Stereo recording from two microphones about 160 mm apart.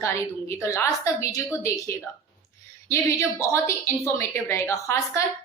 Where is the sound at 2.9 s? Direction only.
15° left (ahead or behind).